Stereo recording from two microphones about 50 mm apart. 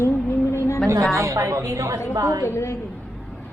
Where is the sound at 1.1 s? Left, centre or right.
Right.